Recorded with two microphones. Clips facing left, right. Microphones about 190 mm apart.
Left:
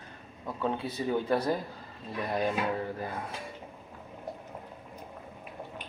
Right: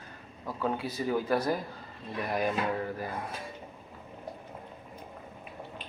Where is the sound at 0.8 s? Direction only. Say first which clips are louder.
Even; 25° left (ahead or behind).